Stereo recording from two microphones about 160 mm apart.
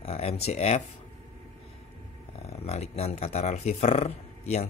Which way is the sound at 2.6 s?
40° left (ahead or behind).